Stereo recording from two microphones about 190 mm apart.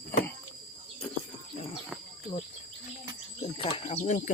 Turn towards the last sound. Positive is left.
turn(degrees=40)  # may be behind; listen again after turning